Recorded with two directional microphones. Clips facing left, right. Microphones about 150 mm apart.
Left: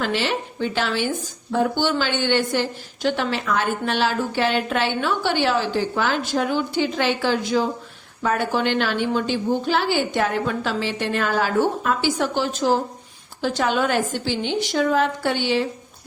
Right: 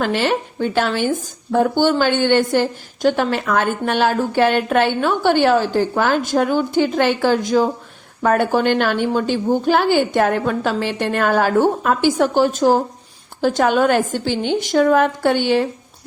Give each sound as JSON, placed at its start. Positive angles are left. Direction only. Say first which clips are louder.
{"t": 0.0, "sound": "speech", "louder": "right 5 dB", "side_deg": -50}